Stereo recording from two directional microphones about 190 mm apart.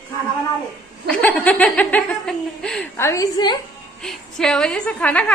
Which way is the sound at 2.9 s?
15° left (ahead or behind).